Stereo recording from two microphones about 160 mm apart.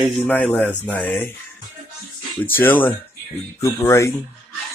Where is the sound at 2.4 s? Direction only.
15° left (ahead or behind).